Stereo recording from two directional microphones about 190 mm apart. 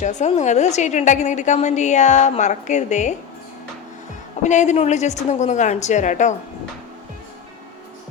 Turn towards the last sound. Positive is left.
turn(degrees=40)  # may be behind; listen again after turning